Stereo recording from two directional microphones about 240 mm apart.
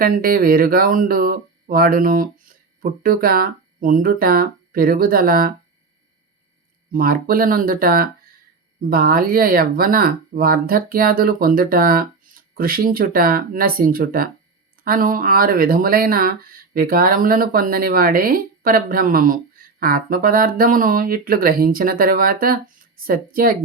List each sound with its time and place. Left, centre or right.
0.0 s speech: right
6.9 s speech: right